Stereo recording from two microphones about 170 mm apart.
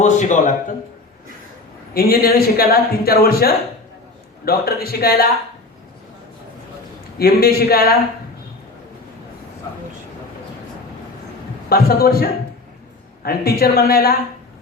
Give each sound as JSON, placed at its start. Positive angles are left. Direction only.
{"t": 0.0, "sound": "a man's voice", "side_deg": 45}
{"t": 1.9, "sound": "a man's voice", "side_deg": 60}
{"t": 7.2, "sound": "a man's voice", "side_deg": 65}
{"t": 11.7, "sound": "a man's voice", "side_deg": 65}